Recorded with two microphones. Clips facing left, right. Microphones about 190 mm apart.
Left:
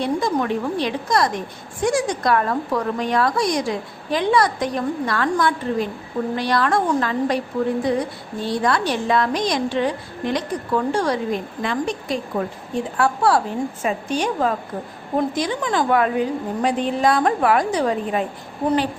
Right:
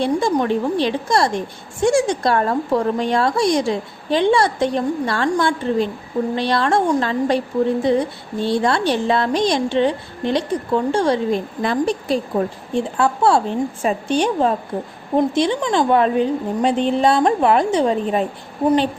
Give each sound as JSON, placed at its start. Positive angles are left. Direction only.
{"t": 0.0, "sound": "a woman's voice", "side_deg": -30}